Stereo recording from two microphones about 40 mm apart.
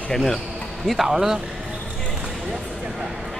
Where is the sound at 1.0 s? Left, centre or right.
Centre.